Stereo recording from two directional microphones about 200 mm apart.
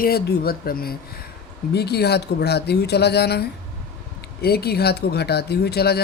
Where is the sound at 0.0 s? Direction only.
50° left (ahead or behind).